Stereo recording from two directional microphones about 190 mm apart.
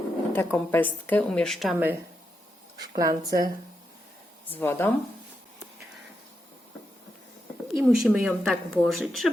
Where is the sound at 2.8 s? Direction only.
20° right (ahead or behind).